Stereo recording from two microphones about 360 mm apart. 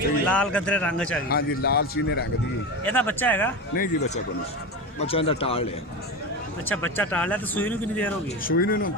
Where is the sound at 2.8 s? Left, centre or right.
Centre.